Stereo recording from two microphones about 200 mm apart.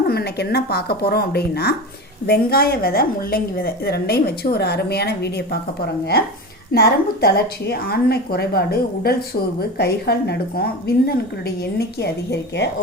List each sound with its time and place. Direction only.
0.1 s a woman's voice: 50° left (ahead or behind)
6.7 s a woman's voice: 50° left (ahead or behind)